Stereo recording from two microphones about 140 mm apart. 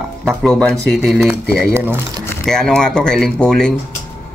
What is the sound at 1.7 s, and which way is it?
Speech, 15° right (ahead or behind).